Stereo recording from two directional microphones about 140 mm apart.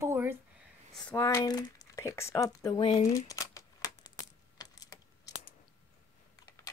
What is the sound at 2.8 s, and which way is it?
Speech, 40° left (ahead or behind).